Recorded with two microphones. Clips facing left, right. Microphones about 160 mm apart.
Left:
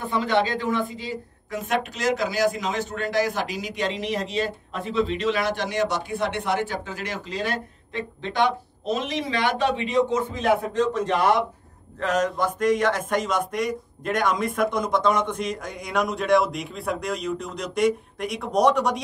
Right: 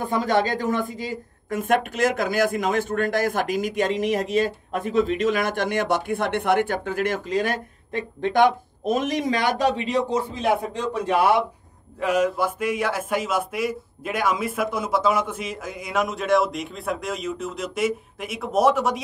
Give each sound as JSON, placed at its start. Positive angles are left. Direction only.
{"t": 0.0, "sound": "a woman's voice", "side_deg": -45}
{"t": 10.4, "sound": "a man's voice", "side_deg": -10}